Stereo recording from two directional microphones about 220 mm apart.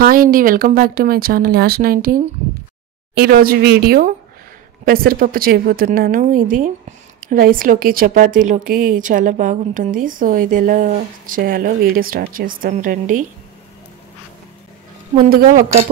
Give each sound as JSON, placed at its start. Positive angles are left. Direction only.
{"t": 0.0, "sound": "speech", "side_deg": -40}
{"t": 15.2, "sound": "speech", "side_deg": -40}